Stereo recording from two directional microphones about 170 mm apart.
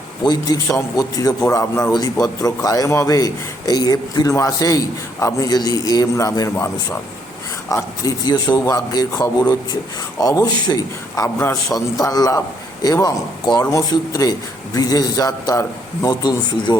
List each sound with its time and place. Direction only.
0.3 s a man's voice: 20° left (ahead or behind)
7.7 s a man's voice: 20° left (ahead or behind)